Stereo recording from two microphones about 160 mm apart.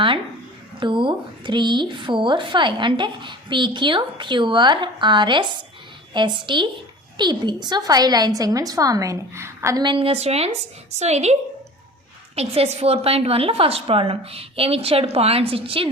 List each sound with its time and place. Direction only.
0.8 s a woman's voice: 30° right (ahead or behind)
9.8 s a woman's voice: 35° right (ahead or behind)
12.4 s a woman's voice: 40° right (ahead or behind)